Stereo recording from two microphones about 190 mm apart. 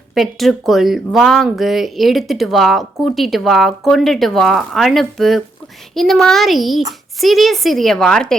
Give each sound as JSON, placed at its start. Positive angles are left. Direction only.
{"t": 0.1, "sound": "speech", "side_deg": 0}